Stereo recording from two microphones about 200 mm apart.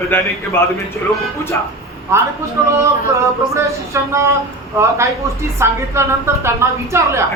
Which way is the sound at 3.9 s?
15° right (ahead or behind).